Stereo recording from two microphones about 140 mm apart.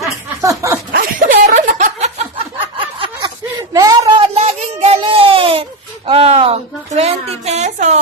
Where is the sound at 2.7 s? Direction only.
35° right (ahead or behind).